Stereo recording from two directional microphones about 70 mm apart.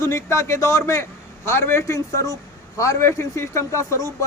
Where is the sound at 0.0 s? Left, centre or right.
Left.